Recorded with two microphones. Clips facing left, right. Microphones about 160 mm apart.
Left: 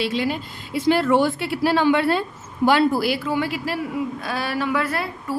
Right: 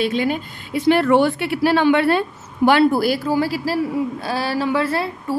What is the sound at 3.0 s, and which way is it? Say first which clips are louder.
A woman's voice: right 4 dB; 40° right (ahead or behind).